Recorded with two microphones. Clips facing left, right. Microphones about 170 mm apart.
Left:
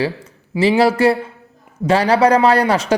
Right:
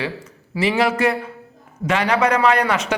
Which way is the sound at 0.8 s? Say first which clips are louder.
Left 4 dB; 35° left (ahead or behind).